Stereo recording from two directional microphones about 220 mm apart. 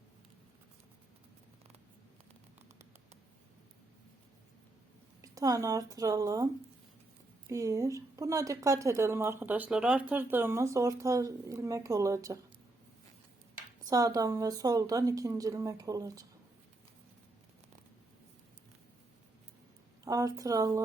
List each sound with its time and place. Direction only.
5.2 s speech: 15° right (ahead or behind)
13.8 s speech: 15° right (ahead or behind)
20.1 s speech: 15° right (ahead or behind)